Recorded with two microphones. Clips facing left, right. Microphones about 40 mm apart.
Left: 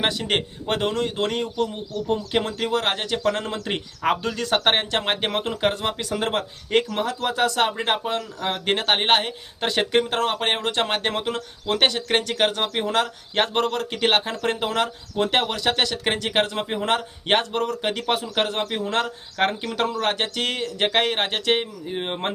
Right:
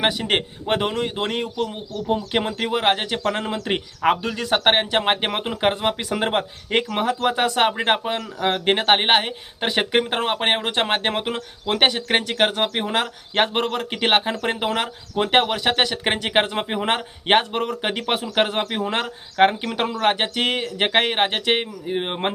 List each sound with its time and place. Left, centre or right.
0.0 s speech: centre